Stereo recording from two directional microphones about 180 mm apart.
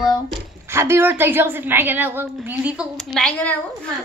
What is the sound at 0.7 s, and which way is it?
A woman's voice, 15° right (ahead or behind).